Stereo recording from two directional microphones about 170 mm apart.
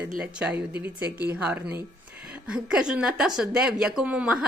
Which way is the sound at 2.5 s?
5° right (ahead or behind).